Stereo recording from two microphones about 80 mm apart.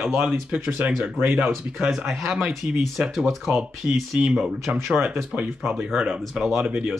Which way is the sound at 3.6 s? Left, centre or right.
Centre.